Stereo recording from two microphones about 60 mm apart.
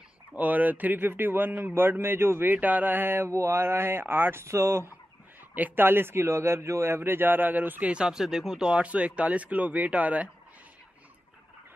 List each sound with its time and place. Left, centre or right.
0.4 s a man's voice: right
2.5 s a man's voice: right
3.3 s speech: right
5.5 s a man's voice: right
7.9 s speech: centre